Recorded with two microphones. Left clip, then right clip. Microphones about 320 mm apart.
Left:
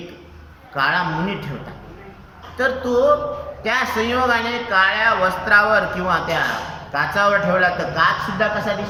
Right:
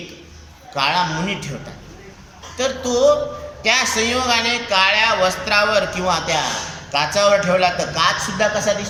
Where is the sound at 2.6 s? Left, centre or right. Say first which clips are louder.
Even; centre.